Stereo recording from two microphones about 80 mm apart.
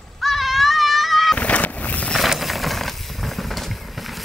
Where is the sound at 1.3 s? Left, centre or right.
Centre.